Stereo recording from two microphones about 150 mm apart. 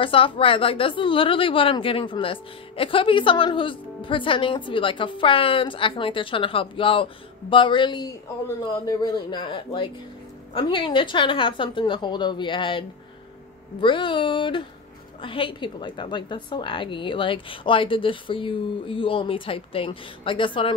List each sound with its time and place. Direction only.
0.0 s a woman's voice: 35° left (ahead or behind)